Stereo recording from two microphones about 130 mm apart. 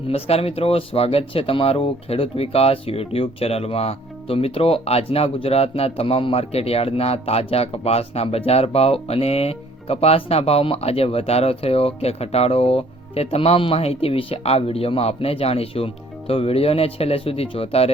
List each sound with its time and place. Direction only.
0.1 s speech: 50° left (ahead or behind)